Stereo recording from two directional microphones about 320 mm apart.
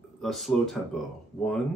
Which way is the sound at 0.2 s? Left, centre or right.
Centre.